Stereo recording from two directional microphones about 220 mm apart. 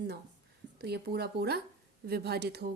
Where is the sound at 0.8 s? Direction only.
45° right (ahead or behind).